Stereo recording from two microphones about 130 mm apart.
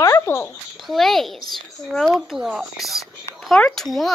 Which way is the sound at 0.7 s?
Centre (ahead or behind).